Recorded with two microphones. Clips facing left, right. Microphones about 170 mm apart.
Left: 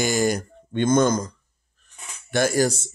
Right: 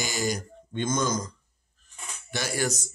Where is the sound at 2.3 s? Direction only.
45° left (ahead or behind).